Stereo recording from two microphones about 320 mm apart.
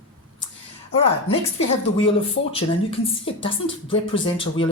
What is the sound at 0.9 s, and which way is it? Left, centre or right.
Speech, centre.